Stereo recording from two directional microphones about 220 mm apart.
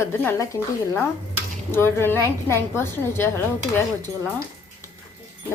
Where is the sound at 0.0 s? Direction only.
10° left (ahead or behind).